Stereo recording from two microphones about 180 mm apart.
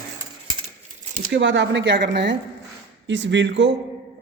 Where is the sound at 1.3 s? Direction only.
90° right.